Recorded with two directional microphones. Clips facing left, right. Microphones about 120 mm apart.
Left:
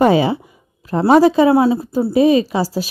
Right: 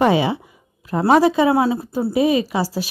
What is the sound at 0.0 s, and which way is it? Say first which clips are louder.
Speech: left 3 dB; 30° left (ahead or behind).